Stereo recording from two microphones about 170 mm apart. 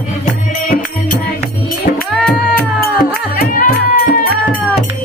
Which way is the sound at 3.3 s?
55° left (ahead or behind).